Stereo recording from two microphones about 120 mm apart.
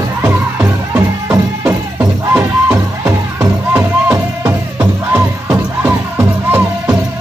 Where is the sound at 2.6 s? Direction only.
15° right (ahead or behind).